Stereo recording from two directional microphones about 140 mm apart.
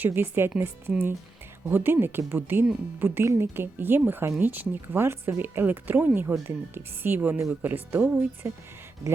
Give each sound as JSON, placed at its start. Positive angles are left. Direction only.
{"t": 0.0, "sound": "speech", "side_deg": -15}